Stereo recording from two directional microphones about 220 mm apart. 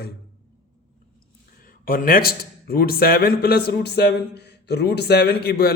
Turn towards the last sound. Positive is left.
turn(degrees=45)  # may be behind; listen again after turning